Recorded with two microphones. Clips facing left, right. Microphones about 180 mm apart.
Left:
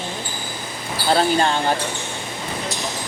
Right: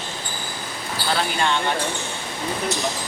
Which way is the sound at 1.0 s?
35° left (ahead or behind).